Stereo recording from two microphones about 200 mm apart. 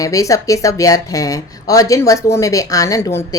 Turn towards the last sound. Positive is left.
turn(degrees=15)  # may be behind; listen again after turning